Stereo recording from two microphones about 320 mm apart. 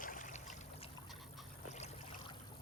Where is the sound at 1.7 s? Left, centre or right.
Centre.